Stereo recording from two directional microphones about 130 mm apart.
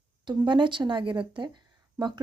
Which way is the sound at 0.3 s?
35° right (ahead or behind).